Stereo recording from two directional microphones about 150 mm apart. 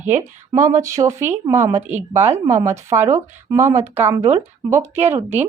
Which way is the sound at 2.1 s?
50° right (ahead or behind).